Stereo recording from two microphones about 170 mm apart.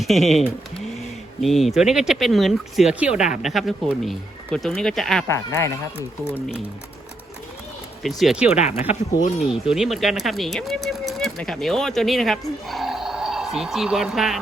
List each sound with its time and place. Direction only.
0.0 s speech: centre (ahead or behind)
5.3 s speech: 15° left (ahead or behind)
8.0 s speech: centre (ahead or behind)
8.5 s speech: 40° left (ahead or behind)
9.4 s speech: centre (ahead or behind)